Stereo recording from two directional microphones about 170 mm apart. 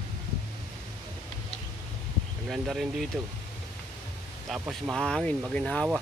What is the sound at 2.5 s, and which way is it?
Speech, centre (ahead or behind).